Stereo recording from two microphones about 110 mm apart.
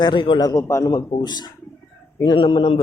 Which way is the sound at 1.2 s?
40° left (ahead or behind).